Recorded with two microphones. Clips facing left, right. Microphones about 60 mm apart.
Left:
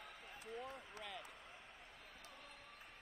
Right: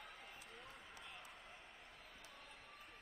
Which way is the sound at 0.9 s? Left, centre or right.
Left.